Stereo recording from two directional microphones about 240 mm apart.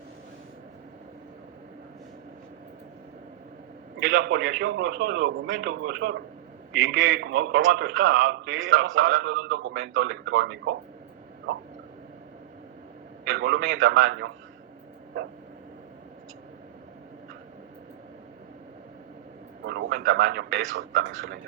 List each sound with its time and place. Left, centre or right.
4.0 s a man's voice: right
13.3 s a man's voice: right
19.6 s a man's voice: right